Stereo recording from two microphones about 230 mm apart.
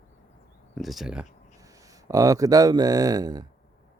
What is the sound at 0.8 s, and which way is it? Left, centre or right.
Speech, centre.